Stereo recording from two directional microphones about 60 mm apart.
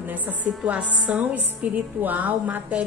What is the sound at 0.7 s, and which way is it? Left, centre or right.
A woman's voice, right.